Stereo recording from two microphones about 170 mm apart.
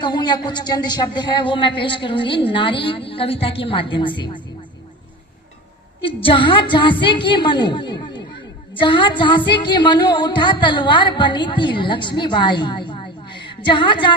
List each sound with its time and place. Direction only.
0.0 s music: 25° left (ahead or behind)
6.0 s music: 30° left (ahead or behind)